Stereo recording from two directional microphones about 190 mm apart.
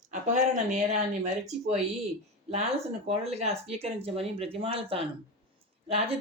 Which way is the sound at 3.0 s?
35° right (ahead or behind).